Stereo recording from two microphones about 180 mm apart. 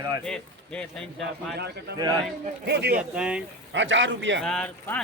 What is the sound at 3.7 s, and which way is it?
Speech, 90° right.